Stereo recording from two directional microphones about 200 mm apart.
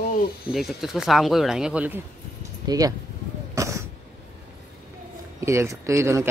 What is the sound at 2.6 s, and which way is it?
Speech, 20° right (ahead or behind).